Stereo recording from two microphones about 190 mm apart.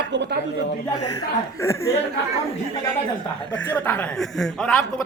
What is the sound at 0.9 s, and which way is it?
Speech, 15° left (ahead or behind).